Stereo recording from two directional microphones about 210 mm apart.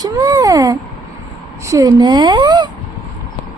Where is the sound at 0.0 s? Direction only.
15° right (ahead or behind).